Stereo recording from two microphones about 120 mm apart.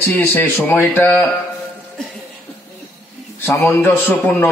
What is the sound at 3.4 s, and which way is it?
Speech, 20° left (ahead or behind).